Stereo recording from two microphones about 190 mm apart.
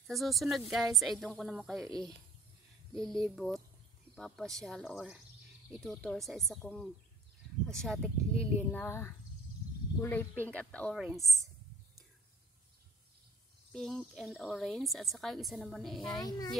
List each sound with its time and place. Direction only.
0.0 s a woman's voice: centre (ahead or behind)
1.8 s speech: 20° right (ahead or behind)
2.9 s a woman's voice: centre (ahead or behind)
13.7 s a woman's voice: centre (ahead or behind)
16.2 s speech: 20° left (ahead or behind)